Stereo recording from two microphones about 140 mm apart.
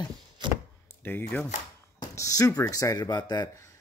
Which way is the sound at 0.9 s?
15° left (ahead or behind).